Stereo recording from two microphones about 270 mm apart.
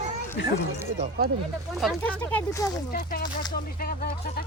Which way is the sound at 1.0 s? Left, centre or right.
Right.